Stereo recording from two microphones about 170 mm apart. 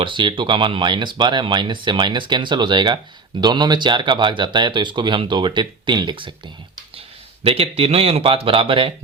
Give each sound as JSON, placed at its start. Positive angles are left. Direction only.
{"t": 0.0, "sound": "speech", "side_deg": -30}
{"t": 7.4, "sound": "speech", "side_deg": -35}